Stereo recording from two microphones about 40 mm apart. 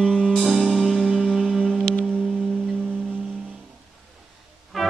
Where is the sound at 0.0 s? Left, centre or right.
Left.